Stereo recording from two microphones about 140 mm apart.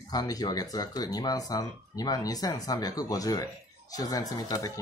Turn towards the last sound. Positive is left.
turn(degrees=25)  # may be behind; listen again after turning